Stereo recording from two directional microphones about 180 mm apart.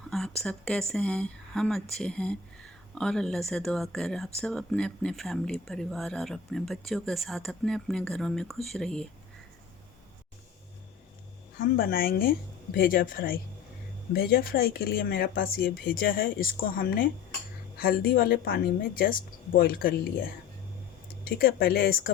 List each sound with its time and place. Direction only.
0.4 s speech: 5° left (ahead or behind)
11.8 s speech: 55° left (ahead or behind)
21.2 s speech: 55° left (ahead or behind)